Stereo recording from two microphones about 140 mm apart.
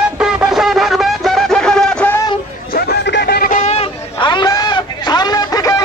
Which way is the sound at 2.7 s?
90° left.